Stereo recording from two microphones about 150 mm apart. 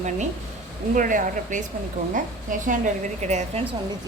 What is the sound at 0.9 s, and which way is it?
A woman's voice, 60° right (ahead or behind).